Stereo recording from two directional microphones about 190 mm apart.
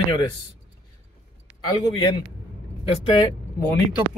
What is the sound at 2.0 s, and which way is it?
Speech, 30° left (ahead or behind).